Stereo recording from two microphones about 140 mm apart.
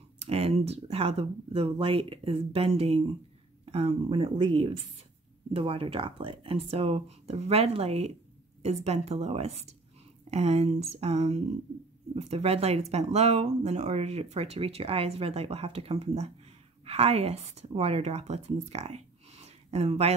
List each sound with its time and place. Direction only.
0.2 s speech: 45° right (ahead or behind)